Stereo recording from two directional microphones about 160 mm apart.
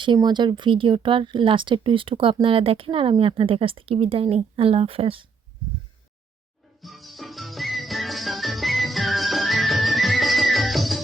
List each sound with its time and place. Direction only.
0.0 s speech: 30° right (ahead or behind)
6.8 s music: centre (ahead or behind)